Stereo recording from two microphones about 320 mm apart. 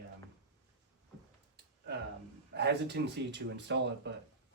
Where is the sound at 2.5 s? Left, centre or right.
Right.